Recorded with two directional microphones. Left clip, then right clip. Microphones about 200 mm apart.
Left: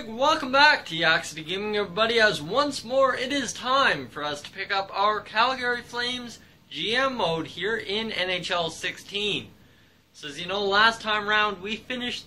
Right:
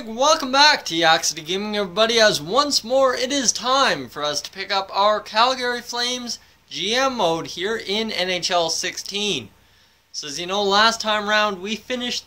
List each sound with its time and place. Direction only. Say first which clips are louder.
0.2 s speech: right 4 dB; 45° right (ahead or behind)